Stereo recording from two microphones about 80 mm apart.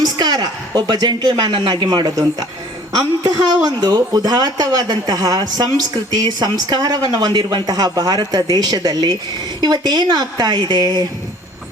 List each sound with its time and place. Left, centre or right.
0.2 s speech: right